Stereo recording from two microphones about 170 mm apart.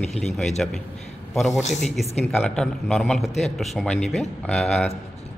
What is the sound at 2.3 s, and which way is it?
Speech, 5° left (ahead or behind).